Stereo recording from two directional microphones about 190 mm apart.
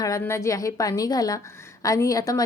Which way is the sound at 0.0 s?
15° left (ahead or behind).